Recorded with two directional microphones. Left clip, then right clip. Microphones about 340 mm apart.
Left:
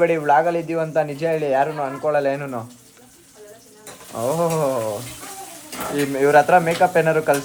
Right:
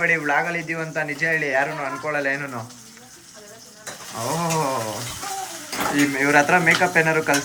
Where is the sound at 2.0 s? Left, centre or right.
Centre.